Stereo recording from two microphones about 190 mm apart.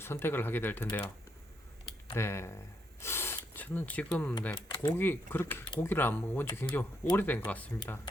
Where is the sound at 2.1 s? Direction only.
15° left (ahead or behind).